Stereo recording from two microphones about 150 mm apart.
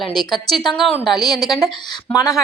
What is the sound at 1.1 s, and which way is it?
Speech, 25° left (ahead or behind).